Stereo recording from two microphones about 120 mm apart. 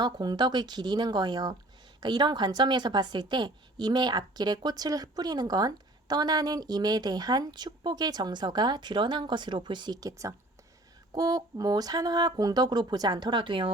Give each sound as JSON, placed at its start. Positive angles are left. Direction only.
{"t": 0.0, "sound": "a woman's voice", "side_deg": -35}